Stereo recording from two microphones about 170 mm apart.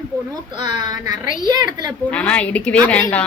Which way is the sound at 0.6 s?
45° left (ahead or behind).